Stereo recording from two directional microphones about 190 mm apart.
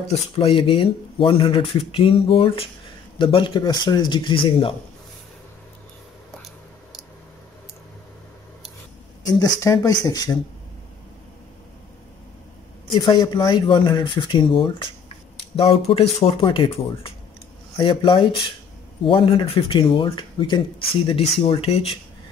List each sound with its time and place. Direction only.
0.4 s speech: 30° left (ahead or behind)
9.4 s speech: 20° left (ahead or behind)
13.0 s speech: 20° left (ahead or behind)